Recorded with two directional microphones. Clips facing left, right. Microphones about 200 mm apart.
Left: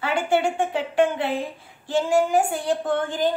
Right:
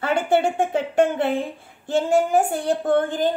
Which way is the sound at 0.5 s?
45° right (ahead or behind).